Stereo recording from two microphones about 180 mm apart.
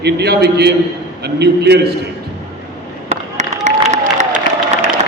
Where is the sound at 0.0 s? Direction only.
65° right (ahead or behind).